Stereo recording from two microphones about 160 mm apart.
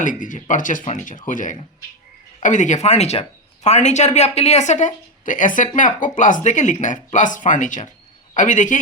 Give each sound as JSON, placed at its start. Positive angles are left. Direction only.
{"t": 0.0, "sound": "speech", "side_deg": 55}